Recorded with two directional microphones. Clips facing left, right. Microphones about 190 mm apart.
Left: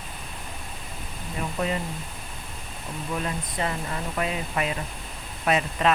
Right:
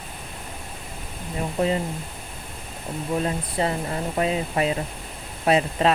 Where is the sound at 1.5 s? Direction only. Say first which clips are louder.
Right 5 dB; 30° right (ahead or behind).